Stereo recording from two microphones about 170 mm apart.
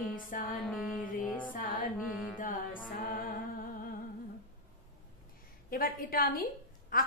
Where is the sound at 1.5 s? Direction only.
55° left (ahead or behind).